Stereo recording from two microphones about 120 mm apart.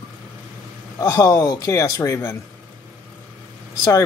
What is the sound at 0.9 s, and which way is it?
A man's voice, 25° left (ahead or behind).